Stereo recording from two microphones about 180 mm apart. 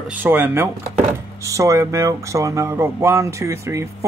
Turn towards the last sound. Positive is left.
turn(degrees=-15)  # may be behind; listen again after turning